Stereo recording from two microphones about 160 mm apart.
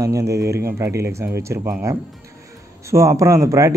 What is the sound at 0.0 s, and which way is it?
Speech, 20° right (ahead or behind).